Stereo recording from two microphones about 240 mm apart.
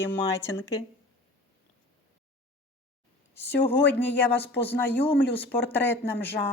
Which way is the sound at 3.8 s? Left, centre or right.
Left.